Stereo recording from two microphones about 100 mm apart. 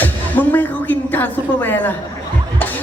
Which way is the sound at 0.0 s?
20° left (ahead or behind).